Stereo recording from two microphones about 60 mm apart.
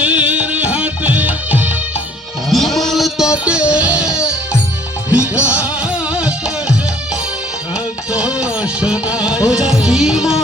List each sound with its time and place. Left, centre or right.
0.0 s music: right
2.5 s a sound: centre
3.2 s music: centre
5.1 s music: right
8.1 s music: centre